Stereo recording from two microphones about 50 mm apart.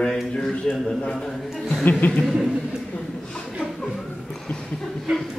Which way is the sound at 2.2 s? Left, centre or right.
Centre.